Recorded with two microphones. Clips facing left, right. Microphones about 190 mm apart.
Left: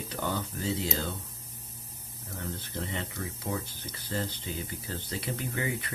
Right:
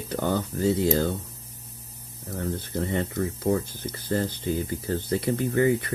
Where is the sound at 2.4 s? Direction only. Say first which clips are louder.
Right 8 dB; 50° right (ahead or behind).